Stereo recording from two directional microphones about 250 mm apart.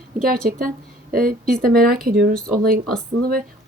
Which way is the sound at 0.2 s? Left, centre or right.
Right.